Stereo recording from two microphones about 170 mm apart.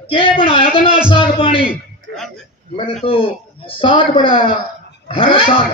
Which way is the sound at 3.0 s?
35° left (ahead or behind).